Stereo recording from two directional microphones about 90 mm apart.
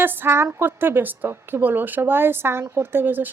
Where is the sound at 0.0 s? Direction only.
25° right (ahead or behind).